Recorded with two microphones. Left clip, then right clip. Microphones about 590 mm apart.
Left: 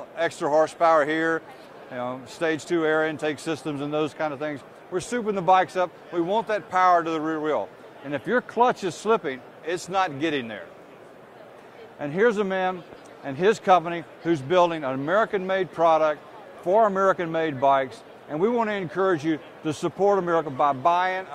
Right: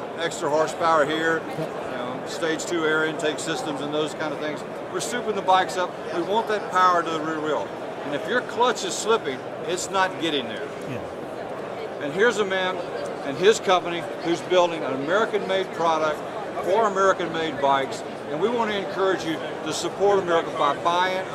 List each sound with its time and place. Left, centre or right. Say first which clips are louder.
0.2 s speech: left 2 dB; left
2.4 s speech: left 1 dB; left
12.2 s speech: right 1 dB; left